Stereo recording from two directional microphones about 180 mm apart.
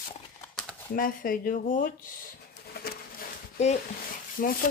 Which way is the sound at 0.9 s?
50° left (ahead or behind).